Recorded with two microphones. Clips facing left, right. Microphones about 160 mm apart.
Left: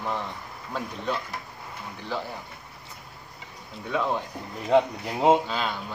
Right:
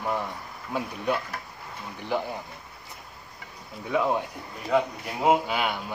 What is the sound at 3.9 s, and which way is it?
Speech, 10° right (ahead or behind).